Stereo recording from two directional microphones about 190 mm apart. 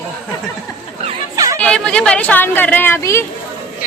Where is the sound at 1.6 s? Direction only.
5° left (ahead or behind).